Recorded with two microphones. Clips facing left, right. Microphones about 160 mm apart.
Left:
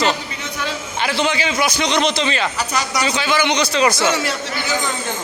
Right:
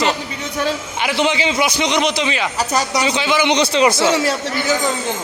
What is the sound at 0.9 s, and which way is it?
A man's voice, 15° right (ahead or behind).